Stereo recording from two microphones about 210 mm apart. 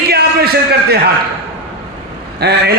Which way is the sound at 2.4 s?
50° right (ahead or behind).